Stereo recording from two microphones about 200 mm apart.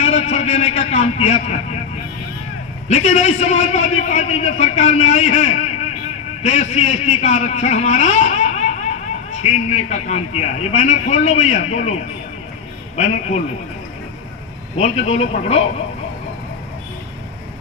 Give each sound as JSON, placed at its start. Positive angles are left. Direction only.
{"t": 0.0, "sound": "a man's voice", "side_deg": 35}
{"t": 2.9, "sound": "a man's voice", "side_deg": 35}
{"t": 14.8, "sound": "a man's voice", "side_deg": 30}